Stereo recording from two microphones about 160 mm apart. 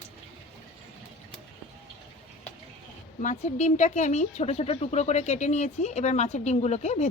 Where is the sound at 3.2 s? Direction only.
50° left (ahead or behind).